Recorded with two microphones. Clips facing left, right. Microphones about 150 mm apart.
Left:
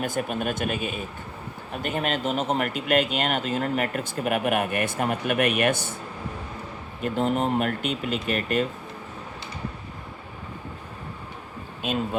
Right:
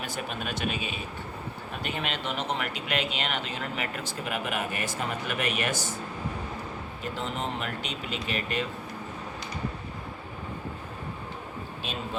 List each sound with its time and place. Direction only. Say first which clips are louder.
0.0 s speech: left 7 dB; 50° left (ahead or behind)
7.0 s speech: left 10 dB; 50° left (ahead or behind)